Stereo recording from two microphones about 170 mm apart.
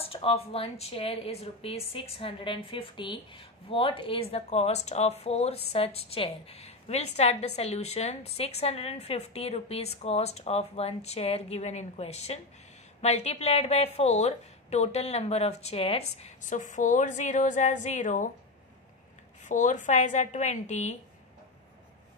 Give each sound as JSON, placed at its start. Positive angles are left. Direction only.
{"t": 0.0, "sound": "a woman's voice", "side_deg": 35}
{"t": 19.4, "sound": "speech", "side_deg": 45}